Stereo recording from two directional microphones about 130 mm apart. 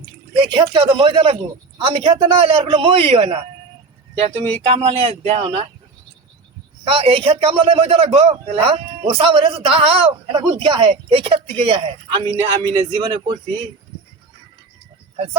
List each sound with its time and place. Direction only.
0.3 s a sound: 40° right (ahead or behind)
0.7 s a man's voice: 40° right (ahead or behind)
6.8 s a man's voice: 40° right (ahead or behind)